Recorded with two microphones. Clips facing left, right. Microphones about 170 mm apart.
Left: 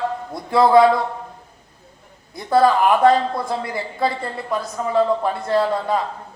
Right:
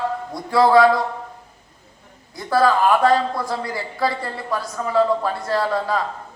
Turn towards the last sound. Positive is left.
turn(degrees=20)  # may be behind; listen again after turning